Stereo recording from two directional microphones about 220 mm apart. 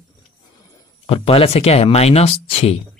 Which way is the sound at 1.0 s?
25° left (ahead or behind).